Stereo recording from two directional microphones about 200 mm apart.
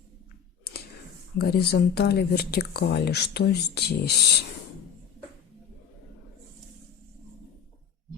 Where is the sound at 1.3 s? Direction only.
50° left (ahead or behind).